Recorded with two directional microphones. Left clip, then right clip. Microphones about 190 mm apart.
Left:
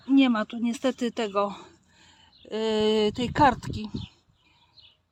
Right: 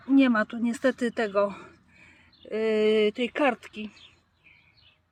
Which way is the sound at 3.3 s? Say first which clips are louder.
Left 4 dB; 15° left (ahead or behind).